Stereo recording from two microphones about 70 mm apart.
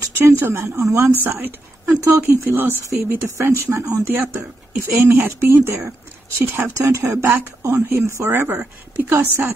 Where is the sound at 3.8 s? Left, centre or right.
Right.